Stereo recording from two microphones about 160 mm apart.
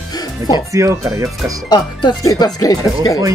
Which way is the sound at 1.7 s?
25° left (ahead or behind).